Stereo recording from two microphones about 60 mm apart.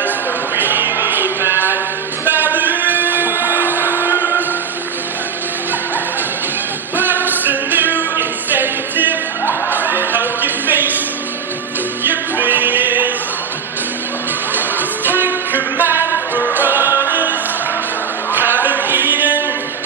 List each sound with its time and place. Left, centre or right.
0.6 s music: right
2.2 s a sound: right
4.0 s music: right
7.0 s music: right
9.5 s music: left
9.8 s a sound: right
12.0 s music: right
15.0 s music: right
18.3 s a sound: right